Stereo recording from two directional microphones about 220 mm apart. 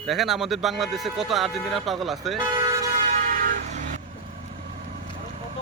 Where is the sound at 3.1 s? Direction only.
40° right (ahead or behind).